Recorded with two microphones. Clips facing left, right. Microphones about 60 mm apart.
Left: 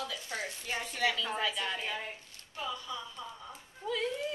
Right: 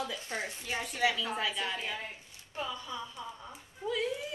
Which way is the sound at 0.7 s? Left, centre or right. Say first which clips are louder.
Right 2 dB; centre.